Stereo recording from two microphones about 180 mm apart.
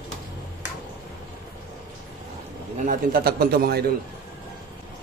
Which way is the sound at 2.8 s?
55° right (ahead or behind).